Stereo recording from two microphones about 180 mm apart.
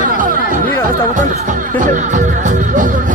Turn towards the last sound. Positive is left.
turn(degrees=-45)  # may be behind; listen again after turning